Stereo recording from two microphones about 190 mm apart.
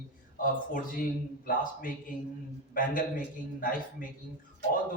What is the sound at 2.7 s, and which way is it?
Speech, 45° left (ahead or behind).